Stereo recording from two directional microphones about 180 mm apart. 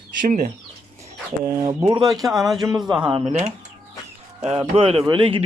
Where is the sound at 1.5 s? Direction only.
20° right (ahead or behind).